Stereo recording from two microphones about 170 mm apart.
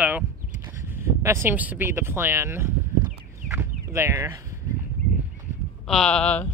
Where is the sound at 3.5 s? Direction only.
15° right (ahead or behind).